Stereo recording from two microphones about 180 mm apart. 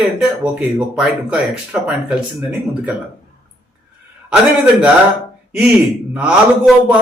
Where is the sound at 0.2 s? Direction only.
5° right (ahead or behind).